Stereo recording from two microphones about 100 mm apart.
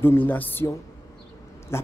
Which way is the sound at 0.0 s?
20° left (ahead or behind).